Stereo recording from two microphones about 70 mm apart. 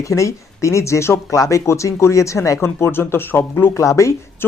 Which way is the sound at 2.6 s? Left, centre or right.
Left.